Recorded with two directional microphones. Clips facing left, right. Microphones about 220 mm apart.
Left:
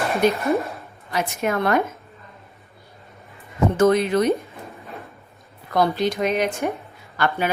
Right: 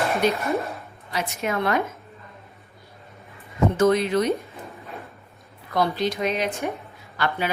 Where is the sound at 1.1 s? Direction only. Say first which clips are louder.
Left 3 dB; 50° left (ahead or behind).